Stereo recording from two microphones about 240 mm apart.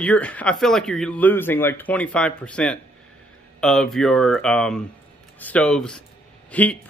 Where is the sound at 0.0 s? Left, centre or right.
Centre.